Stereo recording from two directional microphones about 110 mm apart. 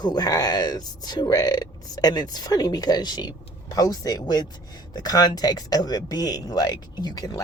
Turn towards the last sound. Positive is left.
turn(degrees=35)  # may be behind; listen again after turning